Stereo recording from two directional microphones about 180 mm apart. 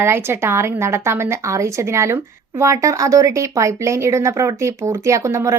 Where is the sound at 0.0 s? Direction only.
15° right (ahead or behind).